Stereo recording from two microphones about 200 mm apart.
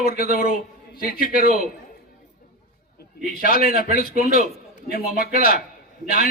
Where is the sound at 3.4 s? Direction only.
45° left (ahead or behind).